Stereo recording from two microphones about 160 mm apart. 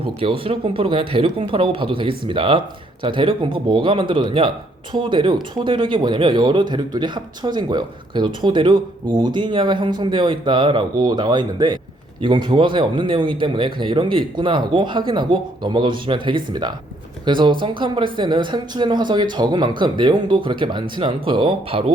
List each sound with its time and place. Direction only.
0.0 s speech: 35° right (ahead or behind)